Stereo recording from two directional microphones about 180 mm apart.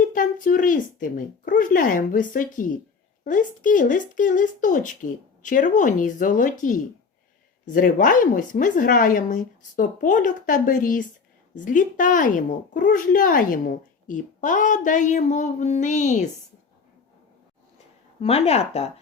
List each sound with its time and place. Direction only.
0.1 s a woman's voice: 45° left (ahead or behind)
18.2 s speech: 35° left (ahead or behind)